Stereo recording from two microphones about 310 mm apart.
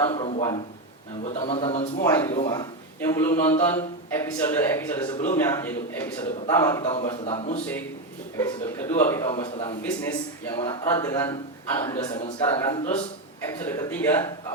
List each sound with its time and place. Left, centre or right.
0.0 s a man's voice: centre
13.6 s a man's voice: centre